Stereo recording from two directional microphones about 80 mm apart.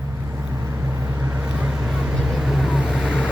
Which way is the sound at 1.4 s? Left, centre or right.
Centre.